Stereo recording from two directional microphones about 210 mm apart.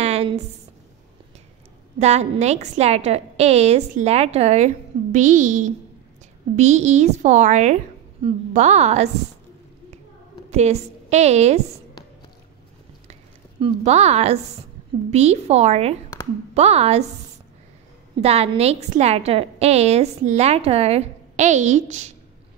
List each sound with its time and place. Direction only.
0.0 s a sound: 30° right (ahead or behind)
2.0 s a woman's voice: 30° right (ahead or behind)
10.5 s a woman's voice: 30° right (ahead or behind)
13.1 s a woman's voice: 30° right (ahead or behind)
18.2 s a woman's voice: 30° right (ahead or behind)